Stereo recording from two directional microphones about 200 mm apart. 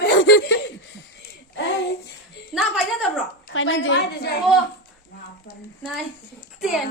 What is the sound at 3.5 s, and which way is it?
Speech, 75° left (ahead or behind).